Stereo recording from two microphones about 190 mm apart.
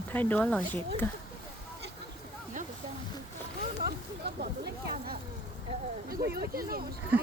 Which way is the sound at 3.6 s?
55° right (ahead or behind).